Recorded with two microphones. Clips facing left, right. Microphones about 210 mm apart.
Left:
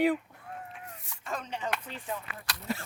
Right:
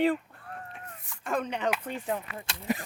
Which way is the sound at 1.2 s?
55° right (ahead or behind).